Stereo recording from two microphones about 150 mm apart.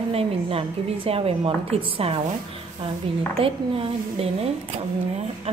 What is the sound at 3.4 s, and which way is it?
A woman's voice, 40° right (ahead or behind).